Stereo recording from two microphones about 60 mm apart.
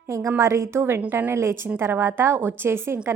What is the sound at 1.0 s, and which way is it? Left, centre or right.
Speech, right.